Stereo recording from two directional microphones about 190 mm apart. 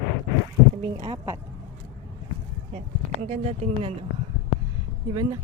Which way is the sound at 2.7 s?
35° right (ahead or behind).